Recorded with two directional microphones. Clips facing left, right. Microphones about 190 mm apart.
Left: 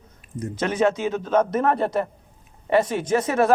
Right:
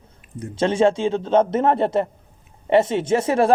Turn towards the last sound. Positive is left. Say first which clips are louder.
# right 2 dB
turn(degrees=-30)  # may be behind; listen again after turning